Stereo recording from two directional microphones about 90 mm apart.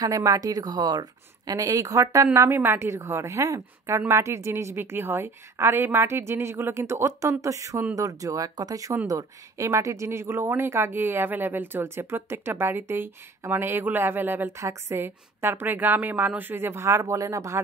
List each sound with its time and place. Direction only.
0.0 s a woman's voice: 40° right (ahead or behind); by 14.5 s 25° right (ahead or behind)
14.6 s speech: 35° right (ahead or behind)